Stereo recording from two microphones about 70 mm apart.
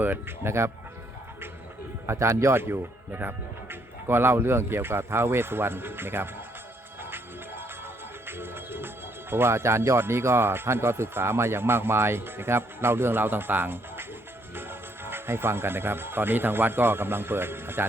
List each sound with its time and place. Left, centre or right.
0.0 s speech: right
2.0 s speech: right
7.0 s music: right
9.3 s speech: right